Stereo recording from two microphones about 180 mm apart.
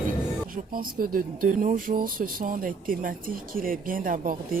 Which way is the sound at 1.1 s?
50° right (ahead or behind).